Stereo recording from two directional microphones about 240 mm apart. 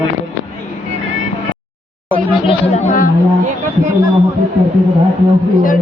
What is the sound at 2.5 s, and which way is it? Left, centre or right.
Speech, left.